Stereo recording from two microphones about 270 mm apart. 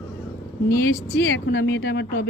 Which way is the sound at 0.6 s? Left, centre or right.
Left.